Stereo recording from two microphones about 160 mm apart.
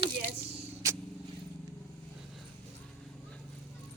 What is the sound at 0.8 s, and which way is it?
Vehicle, 20° right (ahead or behind).